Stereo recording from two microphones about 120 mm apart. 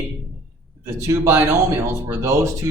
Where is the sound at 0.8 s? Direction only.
25° right (ahead or behind).